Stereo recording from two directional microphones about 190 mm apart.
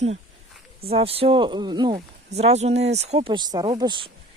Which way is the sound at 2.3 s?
35° right (ahead or behind).